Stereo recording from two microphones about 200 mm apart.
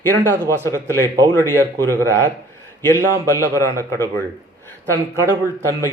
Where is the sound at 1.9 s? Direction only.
15° right (ahead or behind).